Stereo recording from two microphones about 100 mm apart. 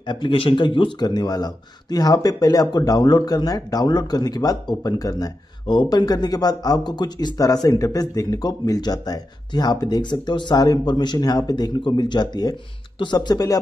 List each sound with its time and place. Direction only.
0.0 s speech: 50° left (ahead or behind)